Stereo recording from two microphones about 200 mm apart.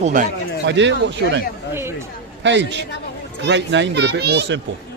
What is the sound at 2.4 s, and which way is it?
Speech, 60° right (ahead or behind).